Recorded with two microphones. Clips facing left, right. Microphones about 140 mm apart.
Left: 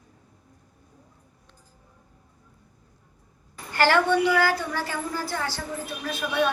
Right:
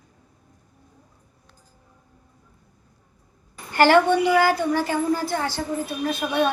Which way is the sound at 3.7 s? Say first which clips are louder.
Right 4 dB; 20° right (ahead or behind).